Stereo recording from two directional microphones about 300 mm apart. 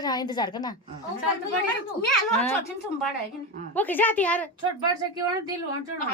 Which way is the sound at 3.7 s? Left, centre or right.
Centre.